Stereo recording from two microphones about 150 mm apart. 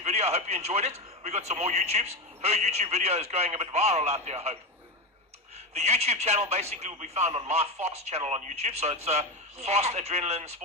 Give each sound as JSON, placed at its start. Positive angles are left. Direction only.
{"t": 0.0, "sound": "speech", "side_deg": -45}
{"t": 5.7, "sound": "speech", "side_deg": -45}